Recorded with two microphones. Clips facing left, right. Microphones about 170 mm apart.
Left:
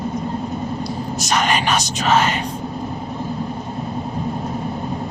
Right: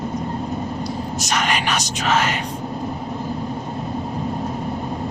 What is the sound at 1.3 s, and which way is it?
Speech, 30° left (ahead or behind).